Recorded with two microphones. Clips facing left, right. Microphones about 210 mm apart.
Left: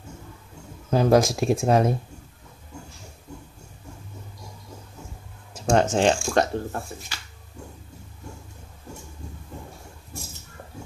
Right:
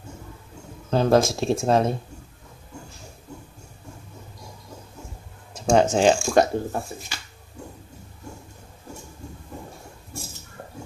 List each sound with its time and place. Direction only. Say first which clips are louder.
0.8 s speech: even; 10° left (ahead or behind)
5.5 s speech: right 2 dB; centre (ahead or behind)